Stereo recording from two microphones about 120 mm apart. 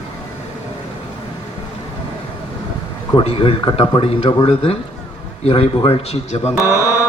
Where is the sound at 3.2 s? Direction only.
50° left (ahead or behind).